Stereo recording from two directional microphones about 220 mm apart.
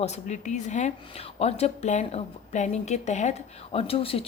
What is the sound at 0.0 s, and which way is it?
Speech, 30° left (ahead or behind).